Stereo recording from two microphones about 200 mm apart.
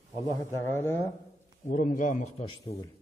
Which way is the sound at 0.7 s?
10° left (ahead or behind).